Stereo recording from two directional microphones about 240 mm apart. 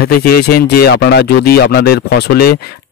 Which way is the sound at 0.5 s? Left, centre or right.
Left.